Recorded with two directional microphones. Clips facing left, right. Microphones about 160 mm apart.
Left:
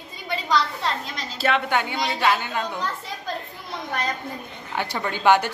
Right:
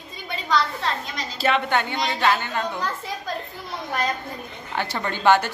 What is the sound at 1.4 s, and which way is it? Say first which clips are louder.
A woman's voice: right 1 dB; 5° left (ahead or behind).